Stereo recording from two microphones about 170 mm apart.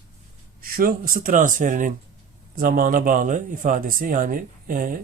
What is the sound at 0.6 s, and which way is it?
Speech, 55° right (ahead or behind).